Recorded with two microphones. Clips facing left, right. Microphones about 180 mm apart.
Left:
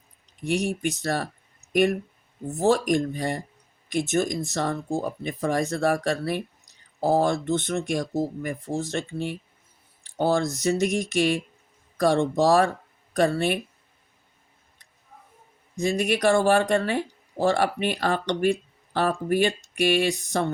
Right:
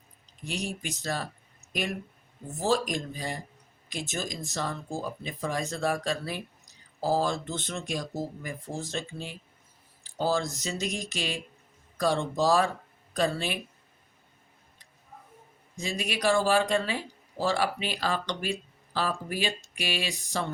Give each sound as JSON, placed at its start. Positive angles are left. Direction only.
{"t": 0.3, "sound": "speech", "side_deg": 65}
{"t": 2.6, "sound": "speech", "side_deg": 65}
{"t": 15.9, "sound": "speech", "side_deg": 60}